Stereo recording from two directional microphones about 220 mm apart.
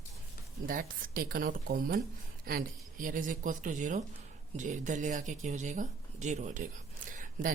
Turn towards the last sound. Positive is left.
turn(degrees=-35)  # may be behind; listen again after turning